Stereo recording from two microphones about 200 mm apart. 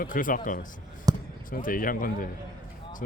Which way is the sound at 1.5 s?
45° left (ahead or behind).